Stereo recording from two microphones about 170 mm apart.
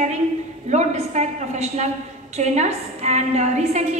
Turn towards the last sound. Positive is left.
turn(degrees=-40)  # may be behind; listen again after turning